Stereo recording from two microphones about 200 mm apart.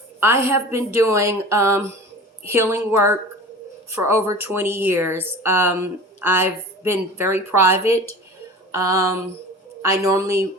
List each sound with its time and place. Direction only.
0.2 s speech: 15° right (ahead or behind)